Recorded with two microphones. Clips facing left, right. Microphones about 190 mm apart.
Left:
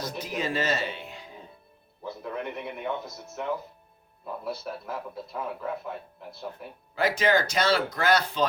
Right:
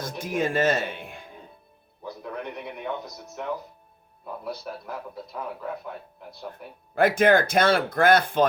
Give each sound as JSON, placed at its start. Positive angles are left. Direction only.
{"t": 0.2, "sound": "speech", "side_deg": -50}
{"t": 2.0, "sound": "a man's voice", "side_deg": 0}
{"t": 6.9, "sound": "speech", "side_deg": -55}